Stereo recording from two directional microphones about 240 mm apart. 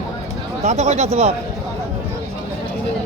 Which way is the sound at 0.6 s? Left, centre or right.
Right.